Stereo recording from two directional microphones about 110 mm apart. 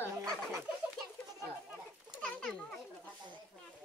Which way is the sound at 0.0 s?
25° right (ahead or behind).